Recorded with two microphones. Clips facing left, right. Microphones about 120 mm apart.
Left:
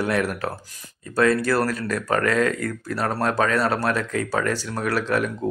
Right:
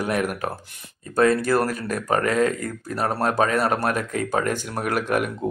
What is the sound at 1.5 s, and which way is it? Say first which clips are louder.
Speech: even; 20° right (ahead or behind).